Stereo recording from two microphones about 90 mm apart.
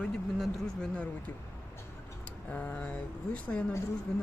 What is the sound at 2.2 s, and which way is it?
Speech, 15° left (ahead or behind).